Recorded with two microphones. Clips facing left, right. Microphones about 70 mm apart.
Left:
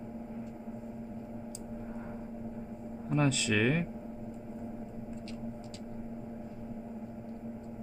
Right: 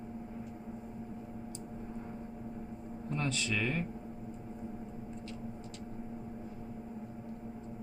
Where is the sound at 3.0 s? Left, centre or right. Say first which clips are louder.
Left 6 dB; centre.